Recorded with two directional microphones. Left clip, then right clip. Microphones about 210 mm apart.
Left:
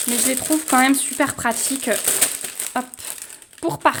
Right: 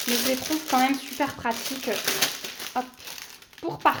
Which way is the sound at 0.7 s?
55° left (ahead or behind).